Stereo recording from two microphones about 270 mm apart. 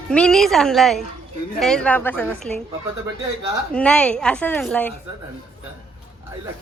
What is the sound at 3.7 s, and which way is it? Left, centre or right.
A woman's voice, centre.